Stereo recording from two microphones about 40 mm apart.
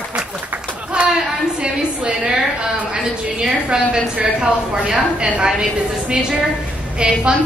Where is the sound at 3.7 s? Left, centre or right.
Centre.